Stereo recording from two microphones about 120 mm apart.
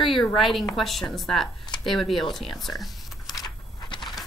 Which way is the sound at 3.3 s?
35° left (ahead or behind).